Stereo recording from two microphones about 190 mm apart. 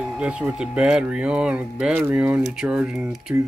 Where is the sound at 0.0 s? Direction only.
5° right (ahead or behind).